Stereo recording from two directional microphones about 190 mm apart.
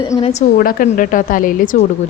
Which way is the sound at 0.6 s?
50° left (ahead or behind).